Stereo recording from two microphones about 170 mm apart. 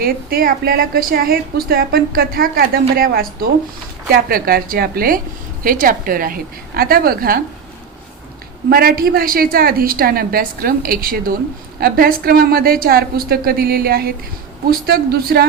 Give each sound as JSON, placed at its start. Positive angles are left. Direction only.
{"t": 0.0, "sound": "a woman's voice", "side_deg": -60}
{"t": 8.7, "sound": "a woman's voice", "side_deg": -65}